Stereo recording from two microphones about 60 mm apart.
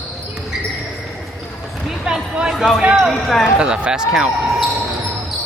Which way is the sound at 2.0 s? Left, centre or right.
Centre.